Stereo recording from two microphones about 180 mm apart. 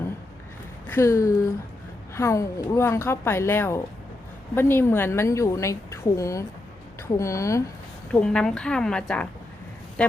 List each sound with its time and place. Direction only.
0.9 s a woman's voice: 15° left (ahead or behind)
8.2 s a woman's voice: 5° left (ahead or behind)